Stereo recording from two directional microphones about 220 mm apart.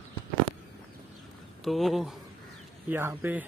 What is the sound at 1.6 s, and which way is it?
Speech, centre (ahead or behind).